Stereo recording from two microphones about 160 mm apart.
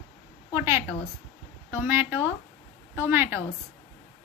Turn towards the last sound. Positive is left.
turn(degrees=-15)  # may be behind; listen again after turning